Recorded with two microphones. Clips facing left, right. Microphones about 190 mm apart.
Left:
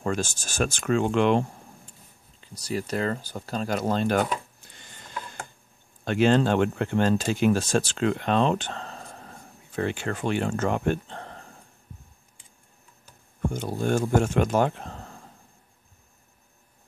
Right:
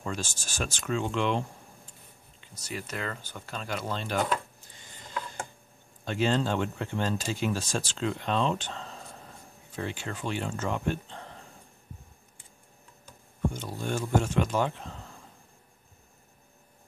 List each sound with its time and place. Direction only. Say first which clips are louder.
0.0 s speech: left 7 dB; 50° left (ahead or behind)
2.4 s speech: left 8 dB; 35° left (ahead or behind)
6.0 s speech: left 6 dB; 65° left (ahead or behind)
13.5 s speech: left 7 dB; 50° left (ahead or behind)